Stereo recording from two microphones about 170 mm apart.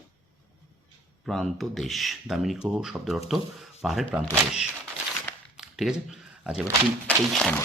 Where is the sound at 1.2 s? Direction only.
Centre (ahead or behind).